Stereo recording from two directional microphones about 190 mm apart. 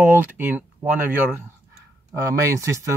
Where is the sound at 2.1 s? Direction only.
15° right (ahead or behind).